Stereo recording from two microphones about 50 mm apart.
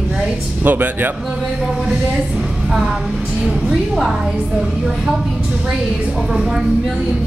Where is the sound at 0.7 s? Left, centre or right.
Right.